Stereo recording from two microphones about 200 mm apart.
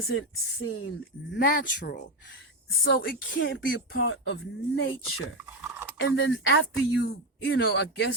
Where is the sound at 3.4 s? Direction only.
65° left (ahead or behind).